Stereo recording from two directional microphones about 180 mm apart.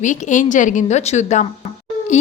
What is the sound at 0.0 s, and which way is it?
A woman's voice, 45° left (ahead or behind).